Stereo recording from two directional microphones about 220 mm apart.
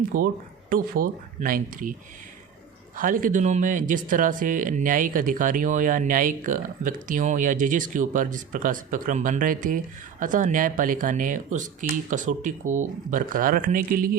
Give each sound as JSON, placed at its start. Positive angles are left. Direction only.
{"t": 0.1, "sound": "speech", "side_deg": -40}